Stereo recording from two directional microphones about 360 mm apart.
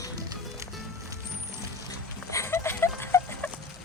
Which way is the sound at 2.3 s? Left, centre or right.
Centre.